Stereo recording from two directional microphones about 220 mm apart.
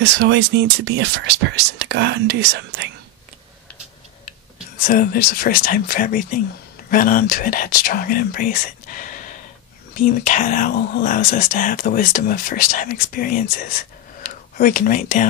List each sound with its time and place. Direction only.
0.0 s speech: 50° right (ahead or behind)
4.8 s speech: 40° left (ahead or behind)